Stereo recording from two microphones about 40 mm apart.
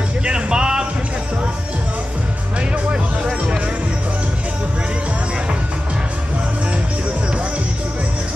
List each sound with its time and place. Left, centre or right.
0.2 s music: right